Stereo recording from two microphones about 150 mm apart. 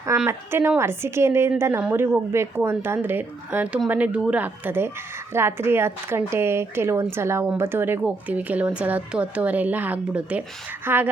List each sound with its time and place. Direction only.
0.3 s a woman's voice: 15° right (ahead or behind)